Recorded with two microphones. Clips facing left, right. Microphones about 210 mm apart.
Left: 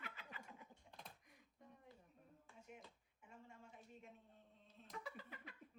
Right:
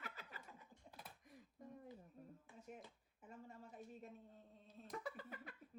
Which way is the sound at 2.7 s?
40° right (ahead or behind).